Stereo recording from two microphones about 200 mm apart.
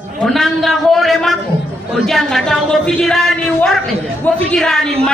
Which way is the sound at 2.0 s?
Centre (ahead or behind).